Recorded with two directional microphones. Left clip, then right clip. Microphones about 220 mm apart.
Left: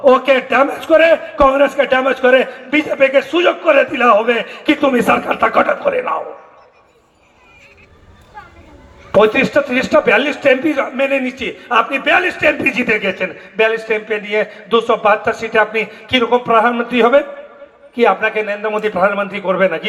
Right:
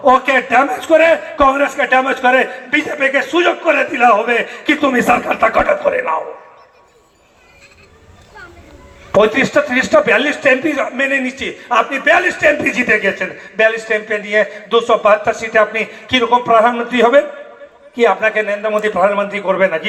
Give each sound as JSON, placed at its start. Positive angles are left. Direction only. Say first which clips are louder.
{"t": 0.0, "sound": "a man's voice", "louder": "even", "side_deg": 50}
{"t": 9.1, "sound": "a man's voice", "louder": "even", "side_deg": 50}